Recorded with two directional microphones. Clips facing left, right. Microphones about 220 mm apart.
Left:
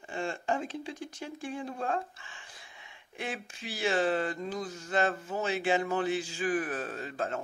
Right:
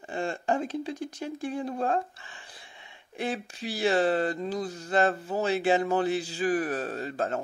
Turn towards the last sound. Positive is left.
turn(degrees=-40)  # may be behind; listen again after turning